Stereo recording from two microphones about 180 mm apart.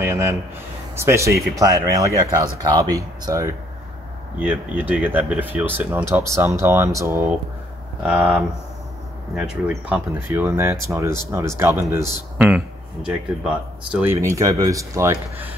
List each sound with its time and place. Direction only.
0.0 s a sound: 15° right (ahead or behind)
0.9 s speech: 15° right (ahead or behind)
14.1 s speech: 20° right (ahead or behind)